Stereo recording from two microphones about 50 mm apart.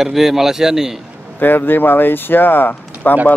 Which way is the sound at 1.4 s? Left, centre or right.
Left.